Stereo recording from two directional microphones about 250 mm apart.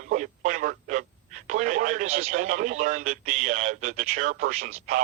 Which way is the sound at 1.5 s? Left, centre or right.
Right.